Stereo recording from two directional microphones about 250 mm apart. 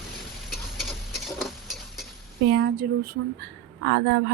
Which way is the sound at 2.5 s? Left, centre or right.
Right.